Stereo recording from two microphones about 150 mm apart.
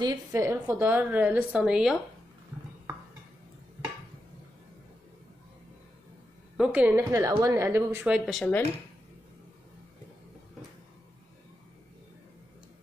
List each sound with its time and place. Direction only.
0.0 s a woman's voice: 25° right (ahead or behind)
0.4 s speech: 15° right (ahead or behind)
6.5 s speech: 5° right (ahead or behind)
8.3 s speech: centre (ahead or behind)